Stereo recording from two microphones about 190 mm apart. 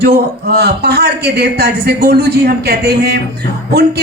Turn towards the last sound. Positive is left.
turn(degrees=-60)  # may be behind; listen again after turning